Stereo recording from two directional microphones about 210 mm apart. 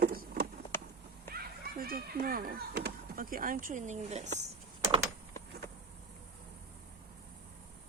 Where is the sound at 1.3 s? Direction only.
45° right (ahead or behind).